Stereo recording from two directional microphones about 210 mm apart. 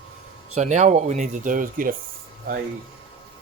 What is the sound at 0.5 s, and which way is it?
Speech, 35° right (ahead or behind).